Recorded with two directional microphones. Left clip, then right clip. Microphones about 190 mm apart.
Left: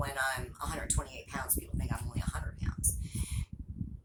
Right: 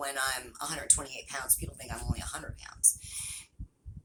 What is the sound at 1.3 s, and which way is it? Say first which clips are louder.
Speech: right 1 dB; 15° right (ahead or behind).